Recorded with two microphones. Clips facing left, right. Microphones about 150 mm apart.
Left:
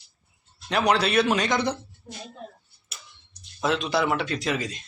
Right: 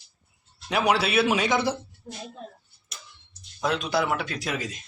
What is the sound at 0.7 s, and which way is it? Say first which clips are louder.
Speech: left 1 dB; 5° right (ahead or behind).